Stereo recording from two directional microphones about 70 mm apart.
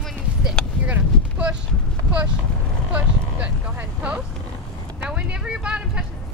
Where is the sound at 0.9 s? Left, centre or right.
Centre.